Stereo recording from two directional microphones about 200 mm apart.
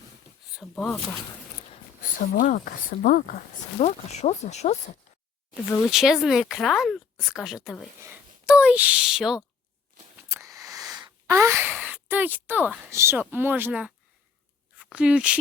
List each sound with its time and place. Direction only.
0.8 s speech: 5° left (ahead or behind)
2.3 s speech: 45° left (ahead or behind)
5.9 s speech: centre (ahead or behind)
10.2 s a sound: 15° right (ahead or behind)
14.8 s speech: 5° right (ahead or behind)